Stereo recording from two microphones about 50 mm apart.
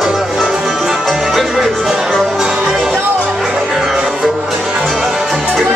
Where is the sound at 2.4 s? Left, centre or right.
Centre.